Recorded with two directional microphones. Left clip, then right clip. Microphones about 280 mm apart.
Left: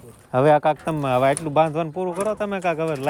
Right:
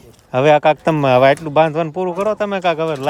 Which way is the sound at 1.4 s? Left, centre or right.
Centre.